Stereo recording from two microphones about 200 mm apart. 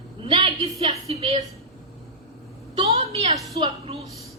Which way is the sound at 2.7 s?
30° right (ahead or behind).